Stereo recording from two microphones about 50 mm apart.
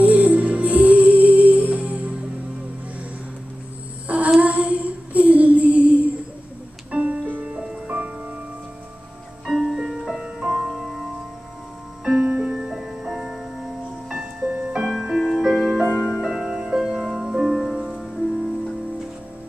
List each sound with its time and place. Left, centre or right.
0.0 s music: right
4.4 s child singing: right
6.9 s music: right
7.5 s music: right
9.5 s music: centre
12.0 s music: centre
14.4 s music: right
14.8 s music: centre